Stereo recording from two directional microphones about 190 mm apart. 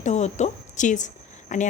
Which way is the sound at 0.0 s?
35° left (ahead or behind).